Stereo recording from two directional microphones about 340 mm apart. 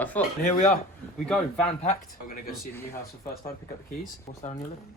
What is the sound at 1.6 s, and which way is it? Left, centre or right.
Speech, centre.